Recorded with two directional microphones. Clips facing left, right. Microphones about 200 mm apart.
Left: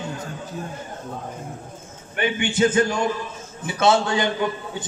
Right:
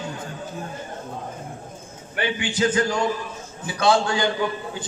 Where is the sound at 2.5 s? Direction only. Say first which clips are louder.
Left 2 dB; 25° left (ahead or behind).